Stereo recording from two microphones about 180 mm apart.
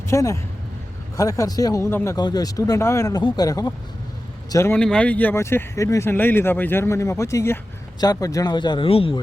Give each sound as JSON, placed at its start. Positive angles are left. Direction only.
{"t": 0.1, "sound": "speech", "side_deg": 15}